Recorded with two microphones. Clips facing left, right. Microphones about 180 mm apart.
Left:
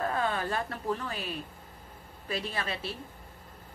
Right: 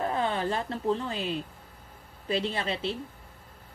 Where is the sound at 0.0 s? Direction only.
20° right (ahead or behind).